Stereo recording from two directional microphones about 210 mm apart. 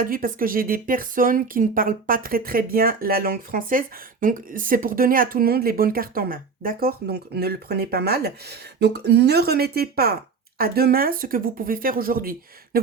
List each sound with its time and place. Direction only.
0.0 s speech: 40° right (ahead or behind)